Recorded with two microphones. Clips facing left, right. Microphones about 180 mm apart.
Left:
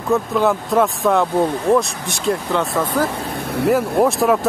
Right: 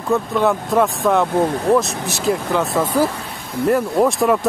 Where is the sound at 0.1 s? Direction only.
Centre (ahead or behind).